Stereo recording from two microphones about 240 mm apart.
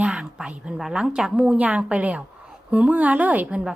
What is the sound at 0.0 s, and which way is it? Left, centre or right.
A woman's voice, centre.